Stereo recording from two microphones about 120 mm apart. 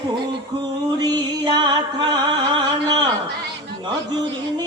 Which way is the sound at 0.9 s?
35° right (ahead or behind).